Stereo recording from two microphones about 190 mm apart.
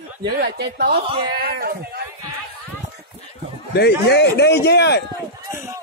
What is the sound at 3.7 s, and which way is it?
Speech, 60° left (ahead or behind).